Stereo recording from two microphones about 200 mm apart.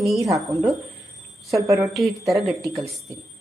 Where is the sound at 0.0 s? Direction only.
Centre (ahead or behind).